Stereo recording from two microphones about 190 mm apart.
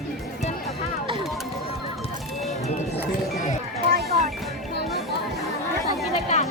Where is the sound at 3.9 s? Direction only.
60° right (ahead or behind).